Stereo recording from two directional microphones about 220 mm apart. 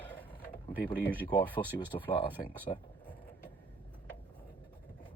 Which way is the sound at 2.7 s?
30° left (ahead or behind).